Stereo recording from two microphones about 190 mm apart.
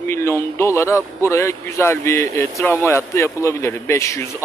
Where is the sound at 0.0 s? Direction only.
15° left (ahead or behind).